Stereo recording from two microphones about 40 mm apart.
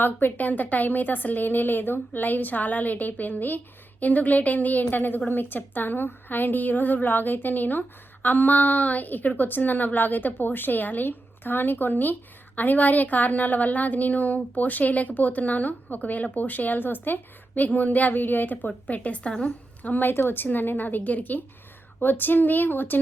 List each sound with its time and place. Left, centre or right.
0.0 s a woman's voice: left
18.9 s a woman's voice: left
19.8 s a woman's voice: left
20.1 s a woman's voice: left